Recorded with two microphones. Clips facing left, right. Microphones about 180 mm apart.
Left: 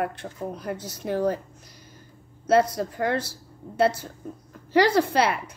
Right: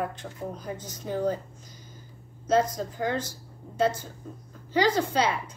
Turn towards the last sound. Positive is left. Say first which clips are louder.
# left 4 dB
turn(degrees=70)  # may be behind; listen again after turning